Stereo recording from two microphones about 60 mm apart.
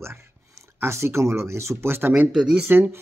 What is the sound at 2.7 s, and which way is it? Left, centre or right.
Speech, right.